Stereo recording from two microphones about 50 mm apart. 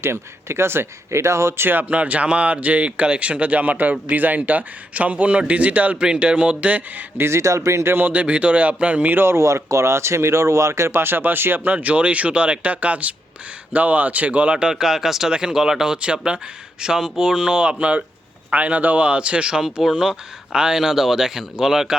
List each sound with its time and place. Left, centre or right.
0.0 s speech: right
1.2 s speech: right
1.6 s speech: right
1.9 s speech: right
7.2 s speech: right
7.9 s speech: right
9.0 s speech: right
9.3 s speech: right
11.7 s speech: right; by 21.9 s centre